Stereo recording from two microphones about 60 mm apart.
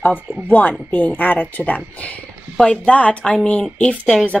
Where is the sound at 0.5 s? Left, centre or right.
Left.